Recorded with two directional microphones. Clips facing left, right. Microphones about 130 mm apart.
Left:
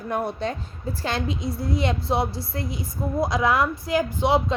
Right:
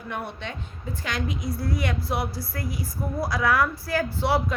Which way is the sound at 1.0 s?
30° left (ahead or behind).